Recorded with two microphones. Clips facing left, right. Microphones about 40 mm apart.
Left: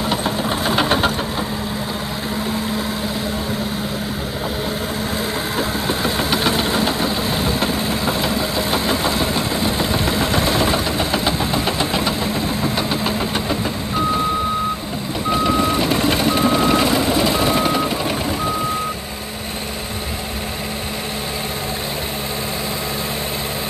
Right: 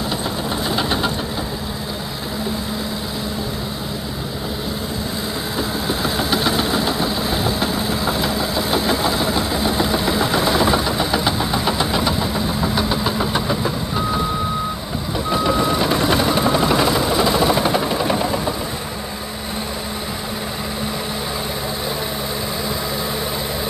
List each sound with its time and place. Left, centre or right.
0.2 s vehicle: centre
5.6 s engine: centre
13.5 s vehicle: centre
15.2 s vehicle: centre
17.6 s helicopter: centre